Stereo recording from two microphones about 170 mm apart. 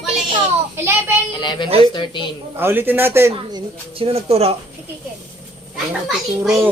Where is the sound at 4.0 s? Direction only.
35° right (ahead or behind).